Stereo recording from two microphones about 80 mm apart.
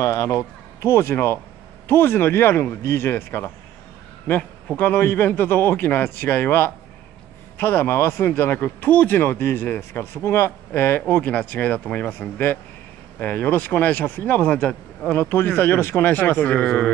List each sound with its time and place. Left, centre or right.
0.0 s speech: left
4.7 s speech: left
15.1 s speech: left